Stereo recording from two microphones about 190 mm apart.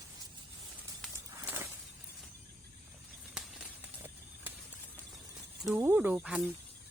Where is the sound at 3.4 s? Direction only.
5° right (ahead or behind).